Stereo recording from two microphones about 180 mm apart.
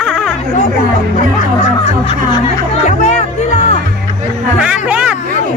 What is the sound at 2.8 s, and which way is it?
Music, 40° left (ahead or behind).